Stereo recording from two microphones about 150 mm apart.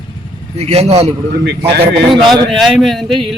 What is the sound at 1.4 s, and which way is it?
Speech, 90° right.